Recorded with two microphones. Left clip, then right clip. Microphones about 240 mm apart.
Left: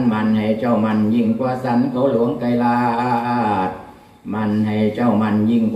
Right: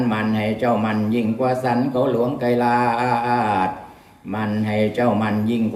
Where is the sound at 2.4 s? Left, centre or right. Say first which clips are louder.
Even; right.